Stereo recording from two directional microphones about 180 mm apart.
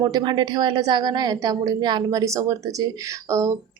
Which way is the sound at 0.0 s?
25° right (ahead or behind).